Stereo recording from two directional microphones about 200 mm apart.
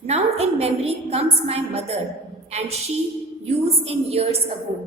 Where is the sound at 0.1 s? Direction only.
30° right (ahead or behind).